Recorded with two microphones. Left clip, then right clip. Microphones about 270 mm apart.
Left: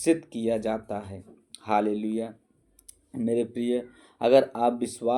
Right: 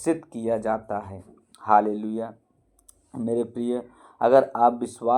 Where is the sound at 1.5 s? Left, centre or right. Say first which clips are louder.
Right 6 dB; centre.